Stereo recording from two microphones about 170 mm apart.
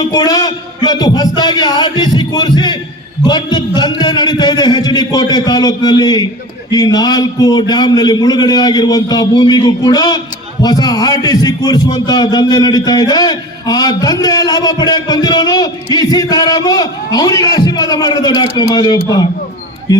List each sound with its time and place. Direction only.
0.0 s a man's voice: 20° left (ahead or behind)